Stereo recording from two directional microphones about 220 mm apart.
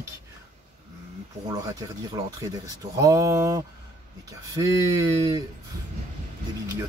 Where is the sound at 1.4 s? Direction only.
15° right (ahead or behind).